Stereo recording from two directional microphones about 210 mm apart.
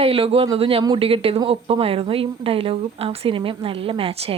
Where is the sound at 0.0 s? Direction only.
25° right (ahead or behind).